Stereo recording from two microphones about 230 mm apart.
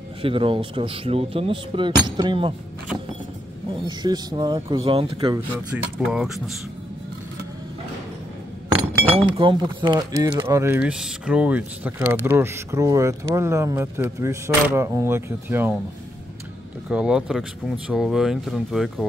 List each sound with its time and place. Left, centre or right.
0.2 s speech: right
3.8 s speech: centre
5.9 s speech: centre
9.1 s speech: right
16.9 s speech: centre